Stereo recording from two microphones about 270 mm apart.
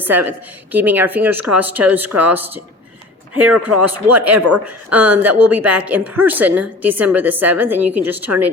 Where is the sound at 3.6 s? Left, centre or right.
Right.